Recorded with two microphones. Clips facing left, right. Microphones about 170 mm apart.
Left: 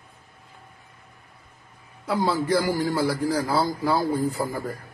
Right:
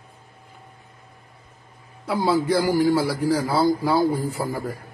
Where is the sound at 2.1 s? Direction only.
10° right (ahead or behind).